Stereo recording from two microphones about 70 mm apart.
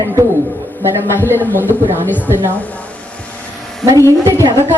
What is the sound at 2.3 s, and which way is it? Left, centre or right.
Speech, right.